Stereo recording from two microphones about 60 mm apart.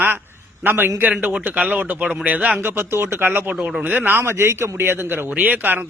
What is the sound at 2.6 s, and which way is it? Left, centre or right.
Speech, right.